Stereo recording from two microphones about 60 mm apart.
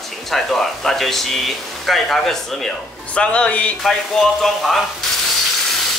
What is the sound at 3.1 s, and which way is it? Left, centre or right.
Speech, centre.